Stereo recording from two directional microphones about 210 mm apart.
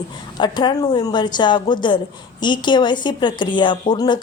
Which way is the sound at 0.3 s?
20° left (ahead or behind).